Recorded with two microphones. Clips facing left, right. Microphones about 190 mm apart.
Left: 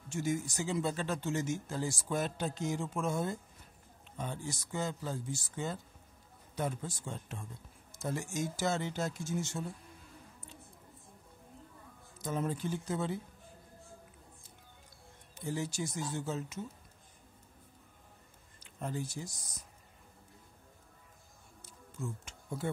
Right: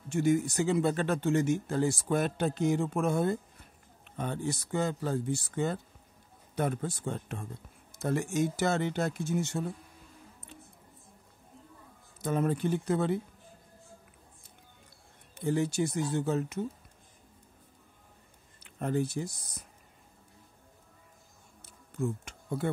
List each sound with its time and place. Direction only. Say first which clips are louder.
0.1 s speech: right 8 dB; 60° right (ahead or behind)
12.2 s speech: right 6 dB; 60° right (ahead or behind)
15.3 s speech: right 8 dB; 60° right (ahead or behind)
18.6 s speech: right 8 dB; 60° right (ahead or behind)
21.6 s music: right 9 dB; 60° right (ahead or behind)